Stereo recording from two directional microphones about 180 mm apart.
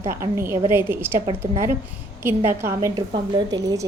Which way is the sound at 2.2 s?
15° right (ahead or behind).